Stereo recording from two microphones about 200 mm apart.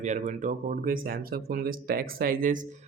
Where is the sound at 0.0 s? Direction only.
35° right (ahead or behind).